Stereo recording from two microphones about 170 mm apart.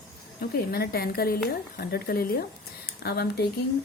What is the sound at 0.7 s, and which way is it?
A woman's voice, 65° left (ahead or behind).